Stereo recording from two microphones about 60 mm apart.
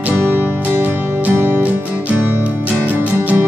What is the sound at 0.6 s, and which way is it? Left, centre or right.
Music, right.